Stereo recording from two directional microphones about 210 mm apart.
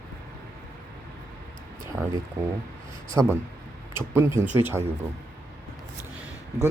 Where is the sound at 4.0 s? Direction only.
10° right (ahead or behind).